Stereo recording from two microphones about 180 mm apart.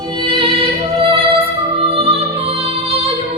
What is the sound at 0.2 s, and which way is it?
Music, 30° right (ahead or behind).